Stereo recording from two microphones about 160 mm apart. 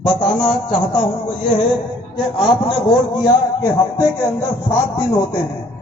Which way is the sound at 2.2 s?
30° left (ahead or behind).